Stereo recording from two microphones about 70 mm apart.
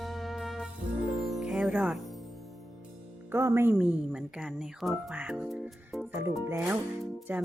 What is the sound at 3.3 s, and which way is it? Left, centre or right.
Music, right.